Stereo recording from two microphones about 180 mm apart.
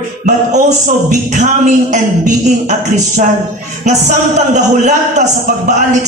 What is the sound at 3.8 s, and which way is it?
A man's voice, 40° right (ahead or behind).